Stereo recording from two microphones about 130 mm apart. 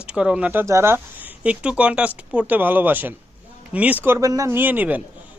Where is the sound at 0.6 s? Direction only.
20° right (ahead or behind).